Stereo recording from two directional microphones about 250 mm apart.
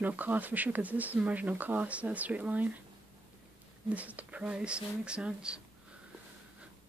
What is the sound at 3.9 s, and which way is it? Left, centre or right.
Speech, centre.